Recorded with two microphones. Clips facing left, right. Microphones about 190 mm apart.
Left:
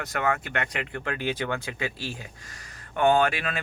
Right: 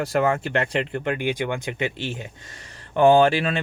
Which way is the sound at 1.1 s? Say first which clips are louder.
Right 3 dB; 15° right (ahead or behind).